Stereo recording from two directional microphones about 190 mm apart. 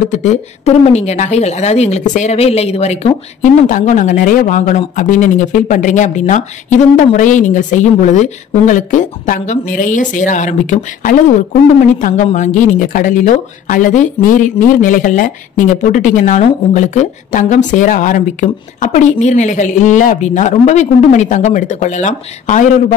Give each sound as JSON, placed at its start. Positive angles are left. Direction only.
{"t": 0.1, "sound": "speech", "side_deg": 40}